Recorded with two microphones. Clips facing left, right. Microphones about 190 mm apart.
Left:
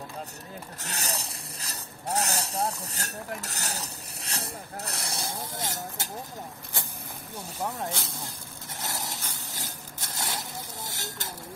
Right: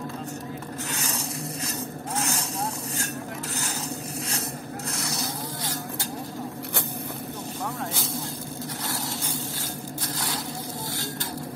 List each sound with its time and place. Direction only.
0.8 s vehicle: 35° left (ahead or behind)
4.8 s vehicle: 30° left (ahead or behind)
10.1 s a sound: 25° left (ahead or behind)